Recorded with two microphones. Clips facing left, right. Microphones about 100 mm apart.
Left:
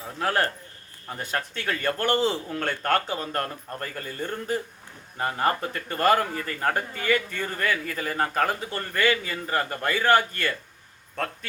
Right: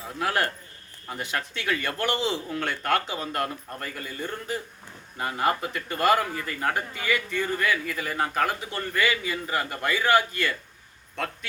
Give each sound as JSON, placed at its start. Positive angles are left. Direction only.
{"t": 0.2, "sound": "a man's voice", "side_deg": 35}